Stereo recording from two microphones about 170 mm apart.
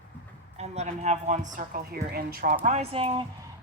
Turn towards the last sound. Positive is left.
turn(degrees=-35)  # may be behind; listen again after turning